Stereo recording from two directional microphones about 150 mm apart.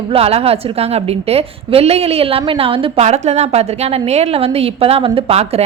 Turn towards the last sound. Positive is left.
turn(degrees=-40)  # may be behind; listen again after turning